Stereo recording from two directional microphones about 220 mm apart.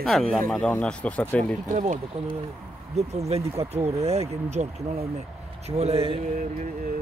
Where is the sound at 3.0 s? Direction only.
30° right (ahead or behind).